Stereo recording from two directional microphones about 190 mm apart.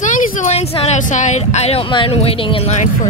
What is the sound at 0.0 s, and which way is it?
A woman's voice, 40° left (ahead or behind).